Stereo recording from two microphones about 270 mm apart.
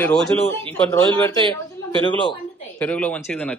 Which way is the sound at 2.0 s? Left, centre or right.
Centre.